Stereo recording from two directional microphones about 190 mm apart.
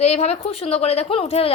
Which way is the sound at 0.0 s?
35° left (ahead or behind).